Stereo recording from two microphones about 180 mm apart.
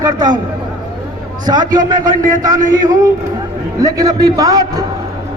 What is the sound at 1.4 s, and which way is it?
A man's voice, 20° right (ahead or behind).